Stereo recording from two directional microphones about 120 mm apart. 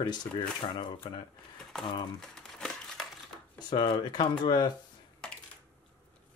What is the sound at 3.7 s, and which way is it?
Speech, 35° left (ahead or behind).